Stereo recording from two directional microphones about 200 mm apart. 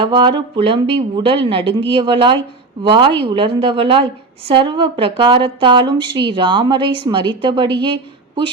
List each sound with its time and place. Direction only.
0.0 s a woman's voice: 25° right (ahead or behind)